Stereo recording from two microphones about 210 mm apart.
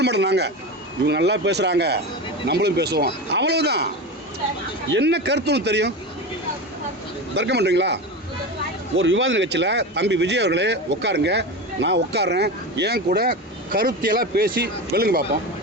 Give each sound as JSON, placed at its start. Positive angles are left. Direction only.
{"t": 0.0, "sound": "speech", "side_deg": -55}
{"t": 4.9, "sound": "speech", "side_deg": -55}
{"t": 7.3, "sound": "speech", "side_deg": -55}
{"t": 9.0, "sound": "speech", "side_deg": -65}